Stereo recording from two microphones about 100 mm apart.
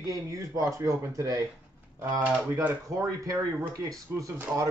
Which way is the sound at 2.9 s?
35° right (ahead or behind).